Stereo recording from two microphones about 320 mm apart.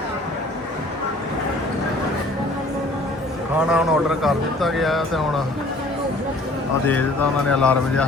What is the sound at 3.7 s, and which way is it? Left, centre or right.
Speech, centre.